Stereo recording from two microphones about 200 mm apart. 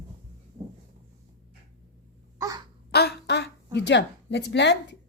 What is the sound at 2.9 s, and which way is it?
A woman's voice, 55° left (ahead or behind).